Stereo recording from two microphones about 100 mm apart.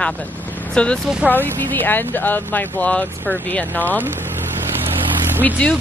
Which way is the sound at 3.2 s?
20° right (ahead or behind).